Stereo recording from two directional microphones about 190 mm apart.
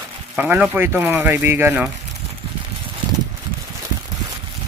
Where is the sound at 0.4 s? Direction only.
10° right (ahead or behind).